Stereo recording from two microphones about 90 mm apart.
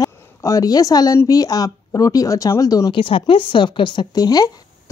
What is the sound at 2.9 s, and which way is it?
Speech, 70° left (ahead or behind).